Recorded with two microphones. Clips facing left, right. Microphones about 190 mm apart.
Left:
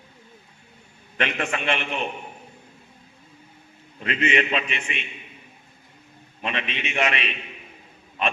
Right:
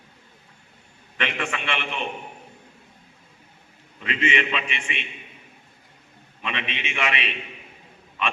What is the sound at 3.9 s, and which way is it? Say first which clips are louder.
A man's voice: left 2 dB; 45° left (ahead or behind).